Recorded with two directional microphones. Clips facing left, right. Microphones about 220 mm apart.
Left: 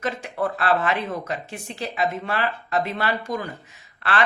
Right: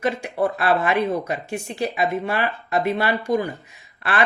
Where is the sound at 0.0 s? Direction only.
15° right (ahead or behind).